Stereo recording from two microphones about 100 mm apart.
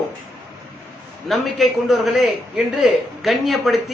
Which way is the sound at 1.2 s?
Centre (ahead or behind).